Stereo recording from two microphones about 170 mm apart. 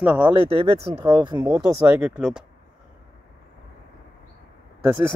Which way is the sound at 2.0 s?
10° right (ahead or behind).